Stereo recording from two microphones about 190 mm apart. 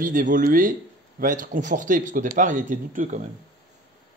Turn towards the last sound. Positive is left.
turn(degrees=-45)  # may be behind; listen again after turning